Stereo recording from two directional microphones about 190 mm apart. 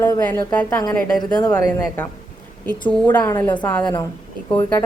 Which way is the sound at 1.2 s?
20° left (ahead or behind).